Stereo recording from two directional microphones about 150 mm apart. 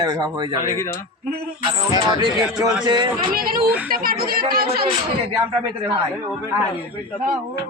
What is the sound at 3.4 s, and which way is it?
Speech, 85° right.